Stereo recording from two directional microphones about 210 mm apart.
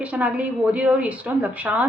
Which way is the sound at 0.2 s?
5° right (ahead or behind).